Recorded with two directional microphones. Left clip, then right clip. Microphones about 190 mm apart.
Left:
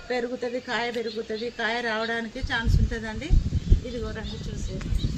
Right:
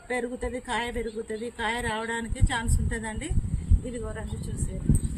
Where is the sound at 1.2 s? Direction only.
10° right (ahead or behind).